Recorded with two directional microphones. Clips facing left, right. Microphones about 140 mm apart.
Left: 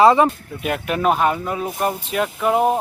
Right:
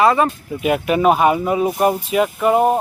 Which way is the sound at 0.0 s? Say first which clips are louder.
Left 2 dB; 25° left (ahead or behind).